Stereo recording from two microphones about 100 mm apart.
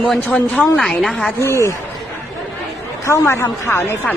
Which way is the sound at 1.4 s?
30° left (ahead or behind).